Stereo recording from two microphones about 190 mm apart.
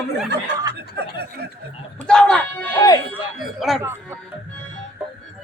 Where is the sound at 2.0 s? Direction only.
5° left (ahead or behind).